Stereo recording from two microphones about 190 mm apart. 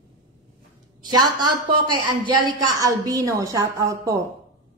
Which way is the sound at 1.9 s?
20° right (ahead or behind).